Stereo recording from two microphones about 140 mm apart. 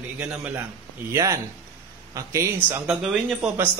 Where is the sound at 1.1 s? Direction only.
25° right (ahead or behind); by 3.7 s 5° right (ahead or behind).